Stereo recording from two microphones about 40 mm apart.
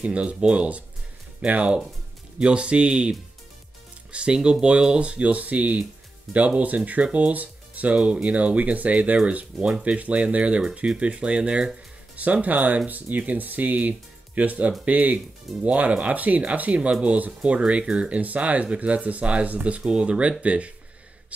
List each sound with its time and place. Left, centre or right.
0.0 s speech: right
12.2 s speech: right
19.8 s speech: right